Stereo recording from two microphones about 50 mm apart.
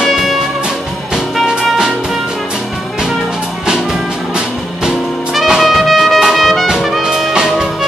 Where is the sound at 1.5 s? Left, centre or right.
Centre.